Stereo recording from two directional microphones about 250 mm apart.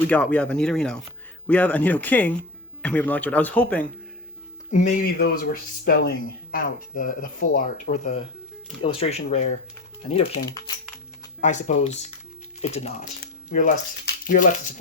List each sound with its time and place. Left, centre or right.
0.1 s speech: centre
4.7 s speech: left